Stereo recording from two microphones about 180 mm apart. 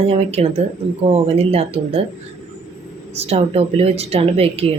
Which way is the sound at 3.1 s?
35° right (ahead or behind).